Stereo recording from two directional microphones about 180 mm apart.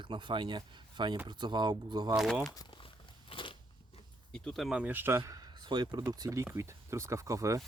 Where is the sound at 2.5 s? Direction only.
25° left (ahead or behind).